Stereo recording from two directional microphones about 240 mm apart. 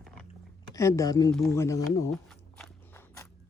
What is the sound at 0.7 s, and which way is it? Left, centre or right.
Speech, centre.